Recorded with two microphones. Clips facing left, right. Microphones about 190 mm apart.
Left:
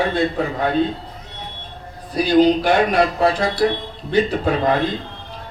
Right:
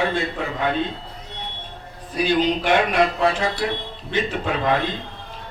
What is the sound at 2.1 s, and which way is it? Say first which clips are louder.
Speech: left 6 dB; 35° left (ahead or behind).